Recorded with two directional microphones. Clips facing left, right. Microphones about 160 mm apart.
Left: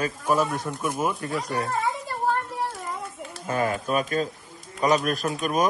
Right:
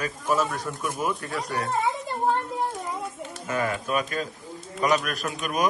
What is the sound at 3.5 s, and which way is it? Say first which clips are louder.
Speech: left 2 dB; 40° left (ahead or behind).